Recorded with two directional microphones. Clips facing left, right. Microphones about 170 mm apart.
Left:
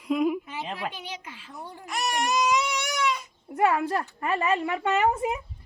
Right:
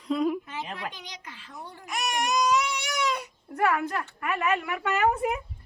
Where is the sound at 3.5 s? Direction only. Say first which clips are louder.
Left 2 dB; 25° left (ahead or behind).